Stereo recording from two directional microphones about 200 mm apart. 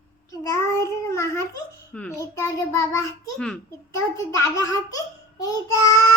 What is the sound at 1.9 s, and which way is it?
A child's voice, 10° left (ahead or behind).